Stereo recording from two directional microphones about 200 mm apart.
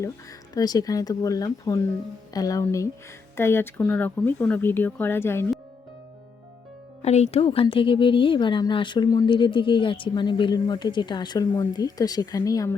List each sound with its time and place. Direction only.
0.5 s speech: 20° left (ahead or behind)
7.0 s speech: 35° left (ahead or behind); by 12.7 s 15° left (ahead or behind)